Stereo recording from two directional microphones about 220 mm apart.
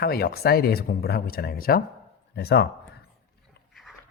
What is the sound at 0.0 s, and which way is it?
Speech, 45° left (ahead or behind).